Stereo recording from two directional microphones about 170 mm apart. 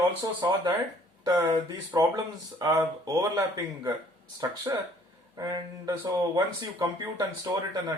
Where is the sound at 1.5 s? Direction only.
25° right (ahead or behind).